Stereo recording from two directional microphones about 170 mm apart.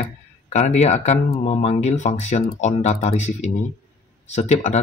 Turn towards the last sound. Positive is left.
turn(degrees=40)  # may be behind; listen again after turning